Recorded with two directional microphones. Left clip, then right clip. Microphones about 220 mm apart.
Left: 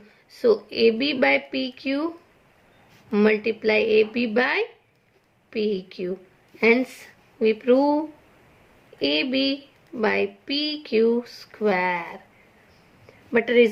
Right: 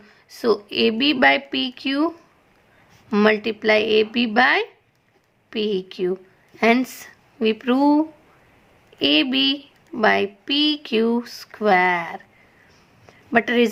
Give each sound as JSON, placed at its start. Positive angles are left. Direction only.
{"t": 0.3, "sound": "speech", "side_deg": -45}
{"t": 3.1, "sound": "speech", "side_deg": -50}
{"t": 9.0, "sound": "speech", "side_deg": -45}
{"t": 13.3, "sound": "speech", "side_deg": -45}